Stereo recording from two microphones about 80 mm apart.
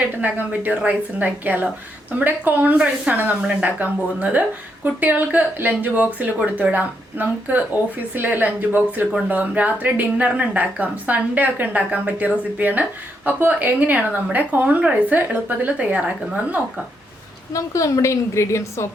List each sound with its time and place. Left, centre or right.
0.2 s speech: centre
17.5 s a woman's voice: left